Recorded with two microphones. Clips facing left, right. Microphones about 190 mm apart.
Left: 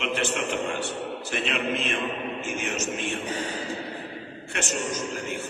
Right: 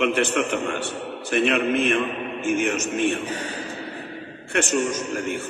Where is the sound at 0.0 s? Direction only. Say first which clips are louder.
Right 6 dB; 60° right (ahead or behind).